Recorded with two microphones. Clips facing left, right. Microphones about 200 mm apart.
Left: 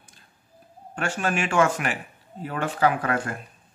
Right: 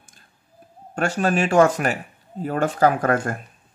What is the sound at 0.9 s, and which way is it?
Speech, 40° right (ahead or behind).